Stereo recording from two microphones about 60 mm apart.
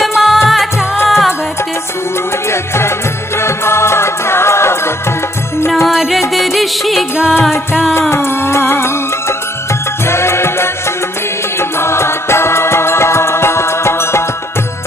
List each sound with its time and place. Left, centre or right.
0.0 s music: centre
2.4 s music: left
5.9 s music: centre
8.1 s music: left